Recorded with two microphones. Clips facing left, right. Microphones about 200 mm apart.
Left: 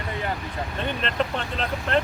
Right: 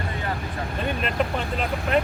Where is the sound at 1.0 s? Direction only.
5° right (ahead or behind).